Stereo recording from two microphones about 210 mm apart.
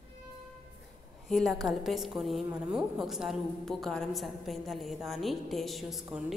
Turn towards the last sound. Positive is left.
turn(degrees=-5)  # may be behind; listen again after turning